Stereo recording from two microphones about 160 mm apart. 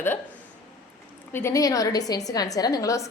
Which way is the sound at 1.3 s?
15° left (ahead or behind).